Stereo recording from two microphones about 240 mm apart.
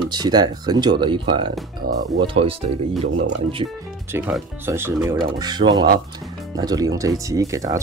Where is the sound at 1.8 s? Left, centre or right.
Right.